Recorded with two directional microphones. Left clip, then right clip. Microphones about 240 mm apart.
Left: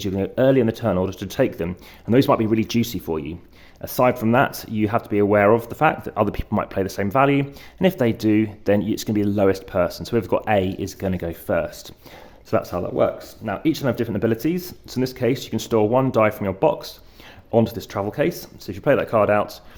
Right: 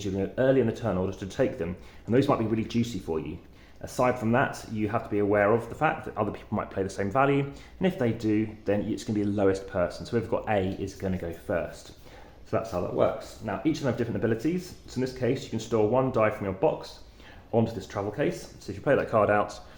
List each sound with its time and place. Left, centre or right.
0.0 s speech: left